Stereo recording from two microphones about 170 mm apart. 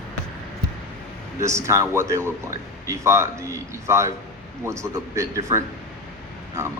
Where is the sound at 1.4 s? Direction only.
15° right (ahead or behind).